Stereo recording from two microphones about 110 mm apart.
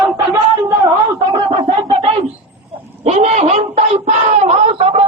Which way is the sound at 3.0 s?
75° right (ahead or behind).